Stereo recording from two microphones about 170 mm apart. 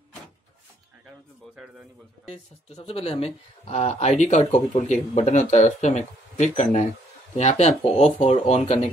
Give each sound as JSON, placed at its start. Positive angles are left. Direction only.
{"t": 2.2, "sound": "speech", "side_deg": 35}